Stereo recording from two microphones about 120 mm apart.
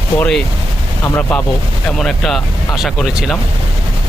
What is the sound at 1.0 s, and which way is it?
Speech, 15° left (ahead or behind).